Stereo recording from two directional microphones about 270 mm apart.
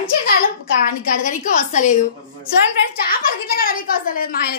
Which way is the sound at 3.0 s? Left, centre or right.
Left.